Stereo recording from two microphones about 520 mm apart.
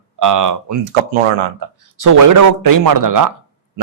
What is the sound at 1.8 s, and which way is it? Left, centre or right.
A man's voice, right.